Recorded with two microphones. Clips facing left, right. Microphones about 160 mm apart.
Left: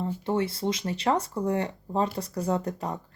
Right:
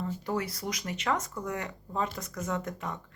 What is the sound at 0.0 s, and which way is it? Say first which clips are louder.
Speech: left 5 dB; 25° left (ahead or behind).